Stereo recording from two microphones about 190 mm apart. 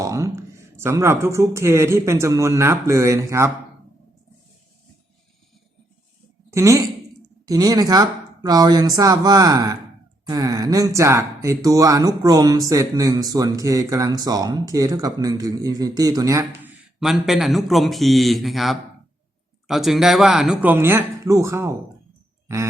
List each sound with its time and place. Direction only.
0.0 s speech: 15° right (ahead or behind)
6.5 s speech: 15° right (ahead or behind)
16.4 s a man's voice: 10° right (ahead or behind)